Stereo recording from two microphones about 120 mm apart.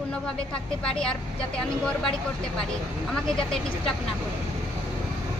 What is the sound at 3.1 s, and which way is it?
Speech, 5° left (ahead or behind).